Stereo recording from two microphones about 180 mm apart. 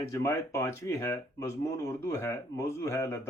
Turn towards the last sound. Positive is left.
turn(degrees=15)  # may be behind; listen again after turning